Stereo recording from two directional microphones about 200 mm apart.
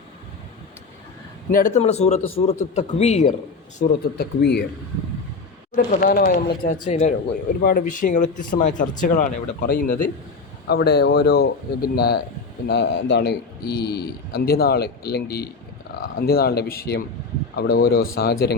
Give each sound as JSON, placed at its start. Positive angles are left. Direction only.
{"t": 1.5, "sound": "a man's voice", "side_deg": 40}
{"t": 4.2, "sound": "speech", "side_deg": 55}
{"t": 5.7, "sound": "a man's voice", "side_deg": 45}
{"t": 6.8, "sound": "speech", "side_deg": 35}
{"t": 7.6, "sound": "a man's voice", "side_deg": 45}